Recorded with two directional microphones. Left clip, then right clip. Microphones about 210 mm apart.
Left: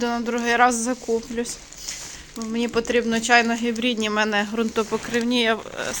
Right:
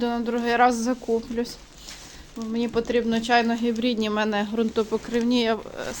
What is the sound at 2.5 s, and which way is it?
Speech, centre (ahead or behind).